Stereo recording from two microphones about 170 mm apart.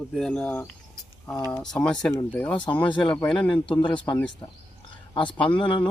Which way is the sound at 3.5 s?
30° left (ahead or behind).